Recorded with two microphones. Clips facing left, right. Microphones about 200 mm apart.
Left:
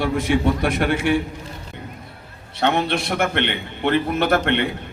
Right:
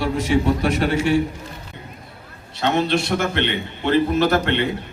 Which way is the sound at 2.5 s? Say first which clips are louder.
Right 1 dB; 55° left (ahead or behind).